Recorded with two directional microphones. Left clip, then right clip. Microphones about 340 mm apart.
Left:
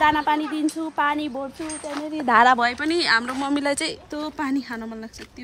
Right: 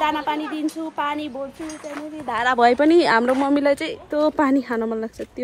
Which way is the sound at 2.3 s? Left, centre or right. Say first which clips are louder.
Left 8 dB; left.